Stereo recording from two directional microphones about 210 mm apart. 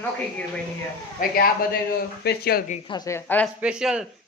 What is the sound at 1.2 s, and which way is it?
A man's voice, 45° left (ahead or behind).